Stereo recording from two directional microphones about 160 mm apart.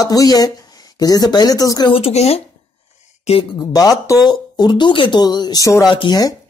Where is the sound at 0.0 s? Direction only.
25° left (ahead or behind).